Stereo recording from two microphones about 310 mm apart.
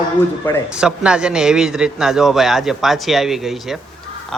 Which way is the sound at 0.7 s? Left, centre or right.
Centre.